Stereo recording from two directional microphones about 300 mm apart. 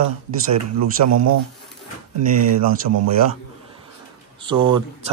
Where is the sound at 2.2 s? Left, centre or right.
Right.